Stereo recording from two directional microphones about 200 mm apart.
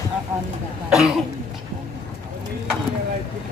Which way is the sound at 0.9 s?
Centre (ahead or behind).